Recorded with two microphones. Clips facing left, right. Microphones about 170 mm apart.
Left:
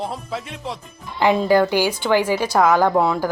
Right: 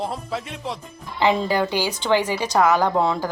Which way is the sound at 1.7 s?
10° left (ahead or behind).